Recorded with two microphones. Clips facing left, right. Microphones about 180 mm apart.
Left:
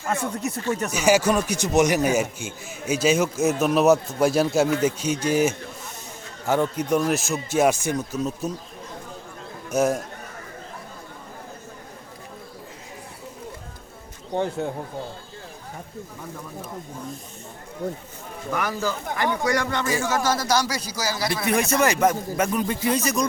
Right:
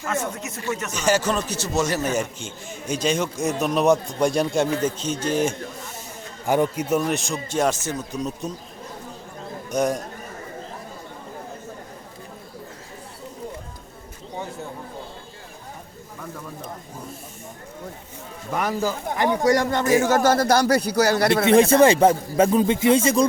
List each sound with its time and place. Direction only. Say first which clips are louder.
0.0 s speech: left 1 dB; 35° left (ahead or behind)
0.9 s a man's voice: left 2 dB; 10° left (ahead or behind)
6.4 s a man's voice: right 2 dB; 15° right (ahead or behind); by 8.5 s 5° left (ahead or behind)
9.6 s speech: left 1 dB; 5° left (ahead or behind)
14.3 s speech: left 8 dB; 65° left (ahead or behind)
18.5 s speech: right 2 dB; 30° right (ahead or behind)
20.1 s a man's voice: right 5 dB; 55° right (ahead or behind)
21.4 s speech: right 7 dB; 30° right (ahead or behind)